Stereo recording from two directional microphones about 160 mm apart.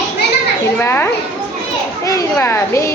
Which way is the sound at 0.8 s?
15° left (ahead or behind).